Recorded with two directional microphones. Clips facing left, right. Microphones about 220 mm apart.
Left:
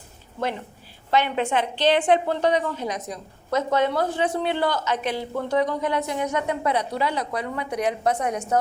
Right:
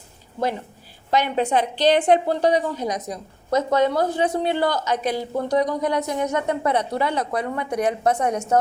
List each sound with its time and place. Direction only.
1.1 s a woman's voice: 40° right (ahead or behind)